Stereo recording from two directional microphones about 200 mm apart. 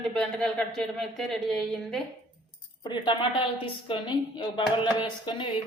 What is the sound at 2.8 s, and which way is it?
A woman's voice, 20° left (ahead or behind).